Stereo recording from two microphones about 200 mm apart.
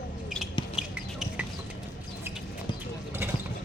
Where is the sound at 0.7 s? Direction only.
5° right (ahead or behind).